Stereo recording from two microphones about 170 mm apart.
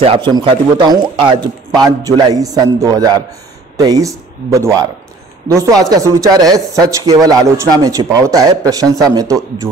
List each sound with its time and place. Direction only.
0.0 s speech: 30° right (ahead or behind)